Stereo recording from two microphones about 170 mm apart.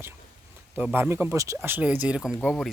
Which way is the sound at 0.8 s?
10° right (ahead or behind).